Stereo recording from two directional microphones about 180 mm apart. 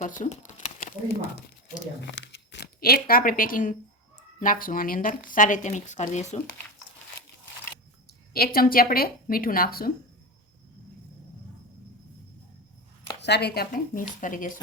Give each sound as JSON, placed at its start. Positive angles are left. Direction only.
{"t": 0.0, "sound": "crumpling", "side_deg": 45}
{"t": 2.0, "sound": "a woman's voice", "side_deg": 85}
{"t": 8.3, "sound": "speech", "side_deg": 55}
{"t": 13.2, "sound": "a woman's voice", "side_deg": 70}